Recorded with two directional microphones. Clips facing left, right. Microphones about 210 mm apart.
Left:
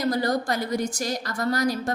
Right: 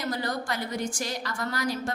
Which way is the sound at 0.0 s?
40° left (ahead or behind).